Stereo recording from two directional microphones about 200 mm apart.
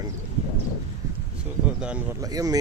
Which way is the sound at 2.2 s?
20° right (ahead or behind).